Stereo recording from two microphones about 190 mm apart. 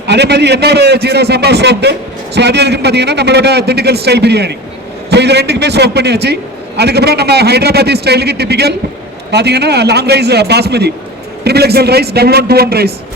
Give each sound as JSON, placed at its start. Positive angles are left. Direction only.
{"t": 0.1, "sound": "a man's voice", "side_deg": -65}